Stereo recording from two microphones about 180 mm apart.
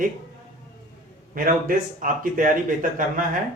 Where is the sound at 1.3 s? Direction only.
50° right (ahead or behind).